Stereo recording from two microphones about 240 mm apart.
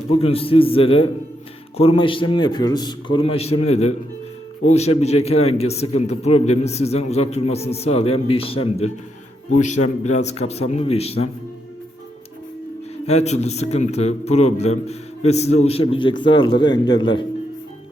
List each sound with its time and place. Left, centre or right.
0.1 s a man's voice: left
13.1 s a man's voice: left